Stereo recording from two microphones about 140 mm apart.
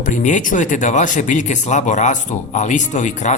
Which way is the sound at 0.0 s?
65° left (ahead or behind).